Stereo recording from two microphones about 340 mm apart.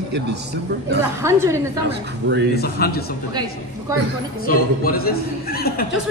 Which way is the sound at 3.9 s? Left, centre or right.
Centre.